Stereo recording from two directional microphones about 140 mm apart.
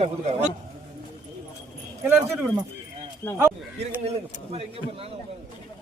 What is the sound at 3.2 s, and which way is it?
Speech, 15° left (ahead or behind).